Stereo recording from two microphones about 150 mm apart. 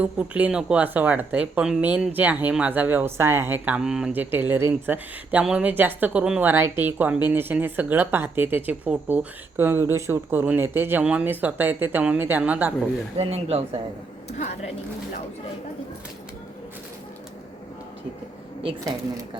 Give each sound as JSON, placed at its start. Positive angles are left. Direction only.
{"t": 0.0, "sound": "speech", "side_deg": -10}
{"t": 13.1, "sound": "speech", "side_deg": -45}
{"t": 14.3, "sound": "a woman's voice", "side_deg": 50}